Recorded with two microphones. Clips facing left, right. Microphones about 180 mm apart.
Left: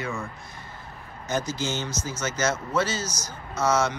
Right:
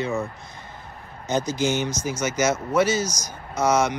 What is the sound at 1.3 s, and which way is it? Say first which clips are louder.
Speech: right 5 dB; 20° right (ahead or behind).